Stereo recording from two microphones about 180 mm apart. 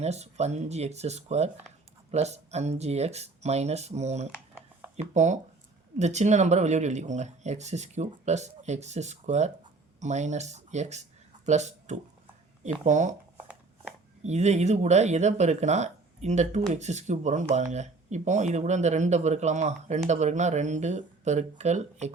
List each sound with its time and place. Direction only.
0.0 s speech: 35° right (ahead or behind)
14.3 s speech: 40° right (ahead or behind)